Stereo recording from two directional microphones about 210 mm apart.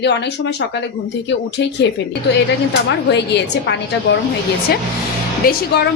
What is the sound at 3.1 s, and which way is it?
Speech, 55° left (ahead or behind).